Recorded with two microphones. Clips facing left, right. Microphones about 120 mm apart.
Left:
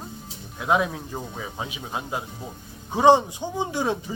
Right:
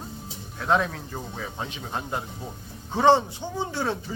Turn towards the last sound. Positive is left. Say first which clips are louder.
# left 3 dB
turn(degrees=15)  # may be behind; listen again after turning